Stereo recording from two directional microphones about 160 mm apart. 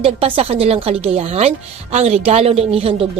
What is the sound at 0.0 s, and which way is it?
A woman's voice, 35° right (ahead or behind).